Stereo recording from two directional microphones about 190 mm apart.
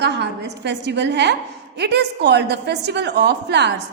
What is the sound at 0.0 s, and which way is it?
A woman's voice, 65° right (ahead or behind).